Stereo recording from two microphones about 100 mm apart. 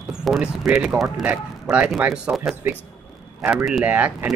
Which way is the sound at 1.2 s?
15° right (ahead or behind).